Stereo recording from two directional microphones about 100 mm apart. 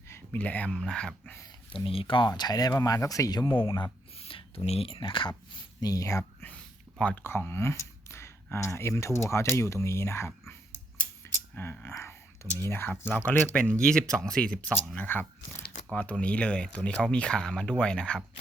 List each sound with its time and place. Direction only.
0.3 s speech: 15° left (ahead or behind)
1.7 s speech: 65° left (ahead or behind); by 3.5 s 35° left (ahead or behind)
3.5 s speech: 55° left (ahead or behind)
4.2 s speech: 75° left (ahead or behind); by 5.3 s 55° left (ahead or behind)
5.5 s speech: 40° left (ahead or behind)
7.0 s speech: 10° left (ahead or behind)
7.3 s speech: 25° left (ahead or behind)
14.9 s speech: 20° left (ahead or behind)